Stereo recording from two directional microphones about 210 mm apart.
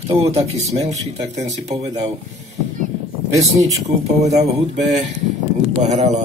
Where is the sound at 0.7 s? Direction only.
30° right (ahead or behind).